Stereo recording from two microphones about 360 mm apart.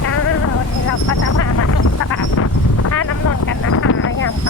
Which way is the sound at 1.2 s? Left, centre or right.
Left.